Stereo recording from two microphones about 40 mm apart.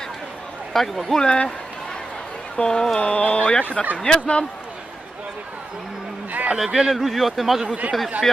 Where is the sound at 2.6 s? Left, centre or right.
Centre.